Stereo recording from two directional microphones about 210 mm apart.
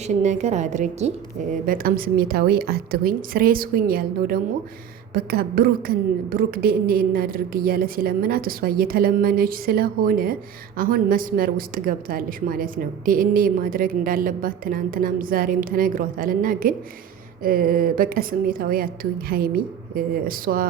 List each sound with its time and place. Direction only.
0.0 s a woman's voice: 35° right (ahead or behind)
1.6 s a woman's voice: 45° right (ahead or behind)